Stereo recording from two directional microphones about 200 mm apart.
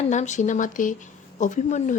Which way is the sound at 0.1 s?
35° left (ahead or behind).